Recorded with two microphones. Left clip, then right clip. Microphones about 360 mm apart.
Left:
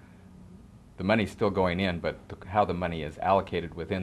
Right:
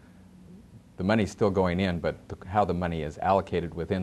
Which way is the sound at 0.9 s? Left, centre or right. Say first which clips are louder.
Even; right.